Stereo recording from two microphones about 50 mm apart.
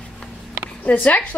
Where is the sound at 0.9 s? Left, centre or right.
Left.